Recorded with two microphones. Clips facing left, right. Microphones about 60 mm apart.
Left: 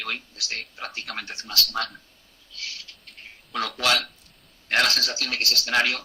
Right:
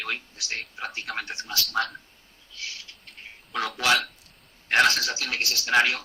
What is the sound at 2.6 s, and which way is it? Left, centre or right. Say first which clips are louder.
Owl: even; right.